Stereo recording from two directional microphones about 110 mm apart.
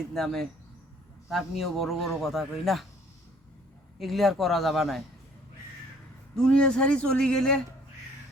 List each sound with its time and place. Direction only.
0.1 s a man's voice: 5° left (ahead or behind)
3.9 s a man's voice: centre (ahead or behind)
6.3 s speech: 10° left (ahead or behind)